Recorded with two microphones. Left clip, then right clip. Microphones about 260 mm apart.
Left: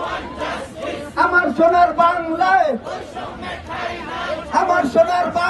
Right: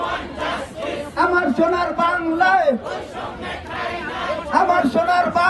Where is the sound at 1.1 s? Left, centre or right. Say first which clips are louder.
Left 2 dB; right.